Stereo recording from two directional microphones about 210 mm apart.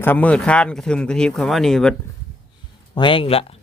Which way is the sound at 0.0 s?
10° left (ahead or behind).